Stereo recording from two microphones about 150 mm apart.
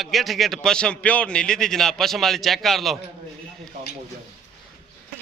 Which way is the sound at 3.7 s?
60° right (ahead or behind).